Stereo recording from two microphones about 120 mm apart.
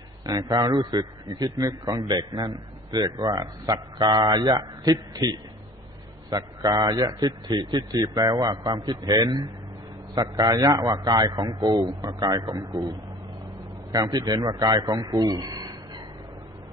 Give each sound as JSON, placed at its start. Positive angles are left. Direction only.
{"t": 0.2, "sound": "a man's voice", "side_deg": -30}
{"t": 4.8, "sound": "a man's voice", "side_deg": -30}
{"t": 6.3, "sound": "a man's voice", "side_deg": -30}
{"t": 13.9, "sound": "a man's voice", "side_deg": -30}